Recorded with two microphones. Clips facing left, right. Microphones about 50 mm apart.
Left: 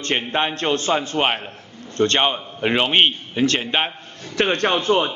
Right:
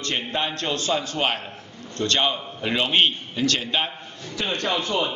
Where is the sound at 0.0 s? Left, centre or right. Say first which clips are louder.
Left 5 dB; left.